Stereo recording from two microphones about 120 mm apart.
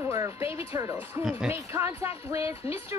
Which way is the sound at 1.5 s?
20° right (ahead or behind).